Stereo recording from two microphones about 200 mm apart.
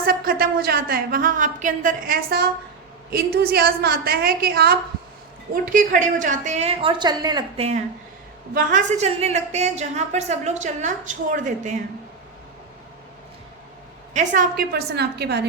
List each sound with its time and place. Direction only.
0.0 s a woman's voice: 45° right (ahead or behind)
5.7 s a woman's voice: 40° right (ahead or behind)
14.1 s a woman's voice: 40° right (ahead or behind); by 15.4 s 55° right (ahead or behind)